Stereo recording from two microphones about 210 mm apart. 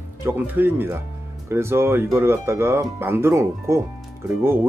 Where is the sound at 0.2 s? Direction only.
10° right (ahead or behind).